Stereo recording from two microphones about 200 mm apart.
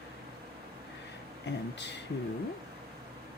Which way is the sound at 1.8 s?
60° left (ahead or behind).